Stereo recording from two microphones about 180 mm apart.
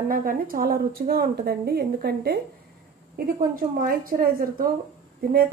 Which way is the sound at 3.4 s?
50° right (ahead or behind).